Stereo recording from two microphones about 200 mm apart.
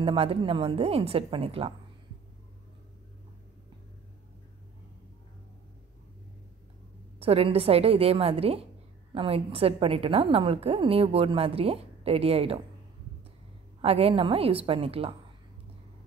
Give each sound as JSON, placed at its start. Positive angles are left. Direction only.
{"t": 0.0, "sound": "a woman's voice", "side_deg": -30}
{"t": 7.2, "sound": "a woman's voice", "side_deg": -30}
{"t": 13.7, "sound": "a woman's voice", "side_deg": -30}